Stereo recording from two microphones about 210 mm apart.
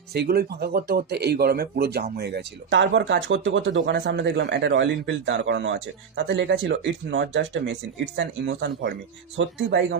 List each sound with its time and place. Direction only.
0.1 s speech: 50° right (ahead or behind)